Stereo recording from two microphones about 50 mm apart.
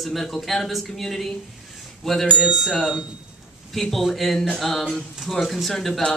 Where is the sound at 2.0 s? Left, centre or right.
Centre.